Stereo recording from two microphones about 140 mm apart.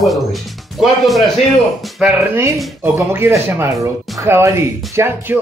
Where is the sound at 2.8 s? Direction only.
15° right (ahead or behind).